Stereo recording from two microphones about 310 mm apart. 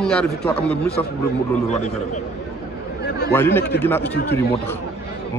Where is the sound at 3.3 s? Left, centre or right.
Centre.